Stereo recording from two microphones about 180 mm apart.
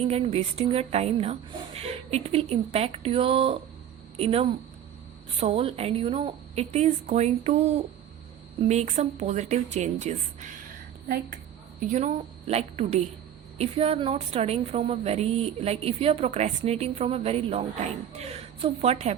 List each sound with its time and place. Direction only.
0.1 s a woman's voice: 35° right (ahead or behind)
11.9 s a woman's voice: 40° right (ahead or behind)